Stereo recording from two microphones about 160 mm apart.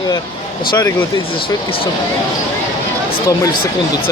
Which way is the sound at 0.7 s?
25° left (ahead or behind).